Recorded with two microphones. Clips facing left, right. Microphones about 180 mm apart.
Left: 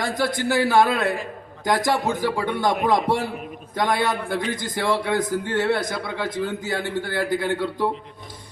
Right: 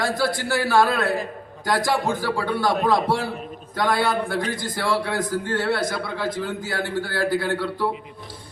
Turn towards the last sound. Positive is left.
turn(degrees=20)  # may be behind; listen again after turning